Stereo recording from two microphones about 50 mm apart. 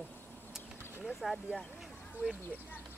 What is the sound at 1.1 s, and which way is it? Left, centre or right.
Speech, centre.